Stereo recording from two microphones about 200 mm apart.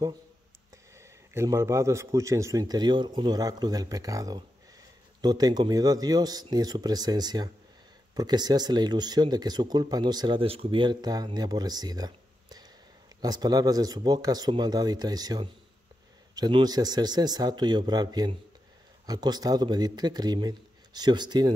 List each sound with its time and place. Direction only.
0.9 s a man's voice: 15° right (ahead or behind)